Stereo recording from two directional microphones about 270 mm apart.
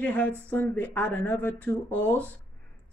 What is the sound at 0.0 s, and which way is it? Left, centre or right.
A woman's voice, centre.